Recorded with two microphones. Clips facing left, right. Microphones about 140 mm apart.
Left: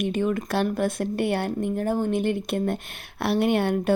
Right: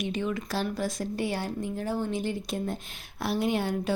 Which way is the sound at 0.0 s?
50° left (ahead or behind).